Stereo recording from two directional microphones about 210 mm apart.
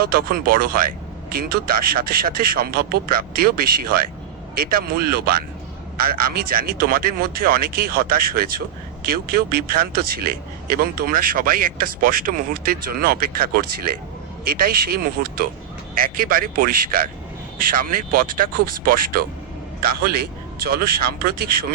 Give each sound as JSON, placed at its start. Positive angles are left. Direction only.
{"t": 0.0, "sound": "speech", "side_deg": -45}